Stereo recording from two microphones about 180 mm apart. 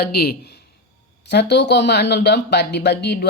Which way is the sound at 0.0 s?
60° left (ahead or behind).